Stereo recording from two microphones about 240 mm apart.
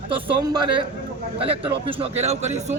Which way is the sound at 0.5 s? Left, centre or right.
Centre.